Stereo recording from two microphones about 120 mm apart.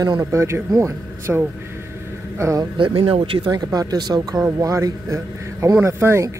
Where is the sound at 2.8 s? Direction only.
45° right (ahead or behind).